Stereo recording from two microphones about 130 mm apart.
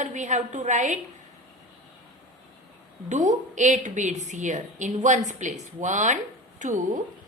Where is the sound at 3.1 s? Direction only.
70° right (ahead or behind).